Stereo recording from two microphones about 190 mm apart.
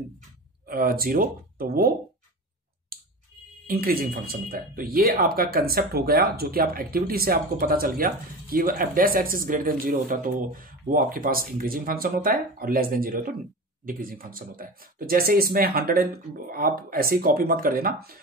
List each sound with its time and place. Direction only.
0.7 s speech: 50° right (ahead or behind)
3.6 s speech: 50° right (ahead or behind)